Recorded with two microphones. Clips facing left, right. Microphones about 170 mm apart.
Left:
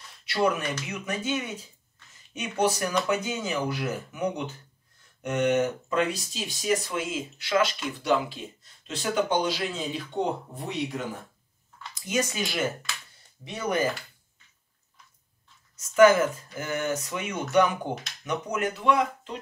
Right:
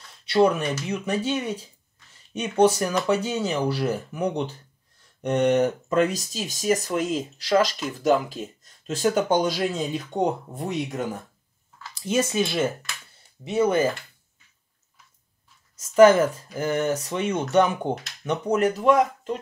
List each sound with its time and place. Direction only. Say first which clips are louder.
0.2 s speech: right 6 dB; 30° right (ahead or behind); by 11.0 s 45° right (ahead or behind)
11.9 s speech: right 5 dB; 25° right (ahead or behind)
15.8 s speech: right 3 dB; 35° right (ahead or behind)